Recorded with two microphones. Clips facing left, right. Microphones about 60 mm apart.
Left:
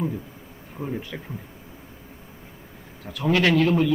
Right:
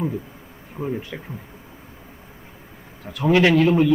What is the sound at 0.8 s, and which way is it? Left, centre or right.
Speech, centre.